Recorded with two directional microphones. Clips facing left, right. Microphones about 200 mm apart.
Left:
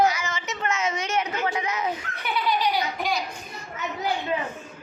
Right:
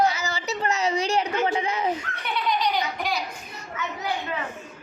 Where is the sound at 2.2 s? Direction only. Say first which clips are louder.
Left 4 dB; centre (ahead or behind).